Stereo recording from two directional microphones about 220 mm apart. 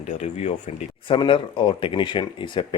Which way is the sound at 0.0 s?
30° left (ahead or behind).